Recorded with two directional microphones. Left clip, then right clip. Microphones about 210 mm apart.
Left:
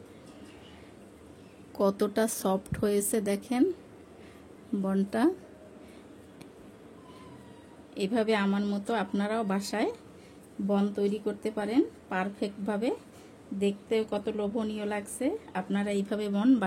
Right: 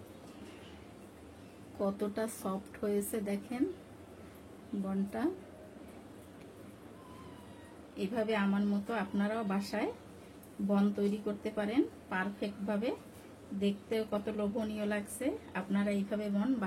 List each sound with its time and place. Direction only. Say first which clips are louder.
1.8 s a woman's voice: left 8 dB; 50° left (ahead or behind)
4.8 s a woman's voice: left 9 dB; 50° left (ahead or behind)
8.0 s a woman's voice: left 6 dB; 55° left (ahead or behind)